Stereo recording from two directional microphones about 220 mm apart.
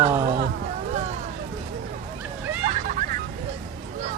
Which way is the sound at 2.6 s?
35° right (ahead or behind).